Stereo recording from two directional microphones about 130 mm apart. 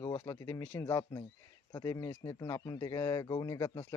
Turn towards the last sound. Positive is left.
turn(degrees=20)  # may be behind; listen again after turning